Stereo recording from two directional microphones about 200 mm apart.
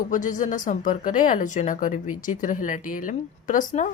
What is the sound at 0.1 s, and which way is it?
Speech, 40° left (ahead or behind).